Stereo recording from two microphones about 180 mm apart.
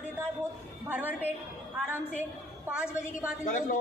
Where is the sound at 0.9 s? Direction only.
10° right (ahead or behind).